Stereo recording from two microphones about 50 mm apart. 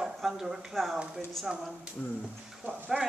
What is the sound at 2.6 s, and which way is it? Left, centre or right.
Speech, right.